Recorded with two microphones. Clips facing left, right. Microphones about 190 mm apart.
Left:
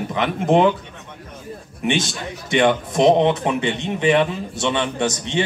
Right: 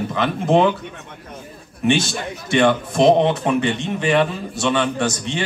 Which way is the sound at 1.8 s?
20° left (ahead or behind).